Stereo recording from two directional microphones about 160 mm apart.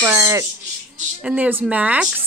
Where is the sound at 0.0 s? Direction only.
20° right (ahead or behind).